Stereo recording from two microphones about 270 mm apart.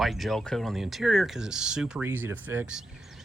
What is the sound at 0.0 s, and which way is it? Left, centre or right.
Speech, centre.